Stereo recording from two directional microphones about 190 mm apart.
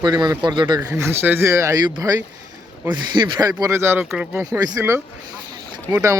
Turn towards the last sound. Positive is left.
turn(degrees=-15)  # may be behind; listen again after turning